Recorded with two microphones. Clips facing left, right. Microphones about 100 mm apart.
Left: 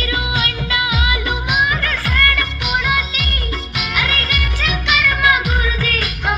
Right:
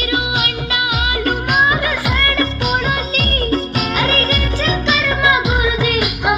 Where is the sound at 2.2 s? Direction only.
30° right (ahead or behind).